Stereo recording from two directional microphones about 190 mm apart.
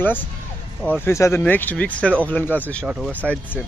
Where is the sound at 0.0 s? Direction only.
10° left (ahead or behind).